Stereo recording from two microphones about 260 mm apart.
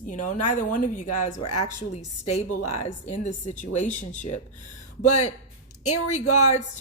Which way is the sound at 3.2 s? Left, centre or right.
Left.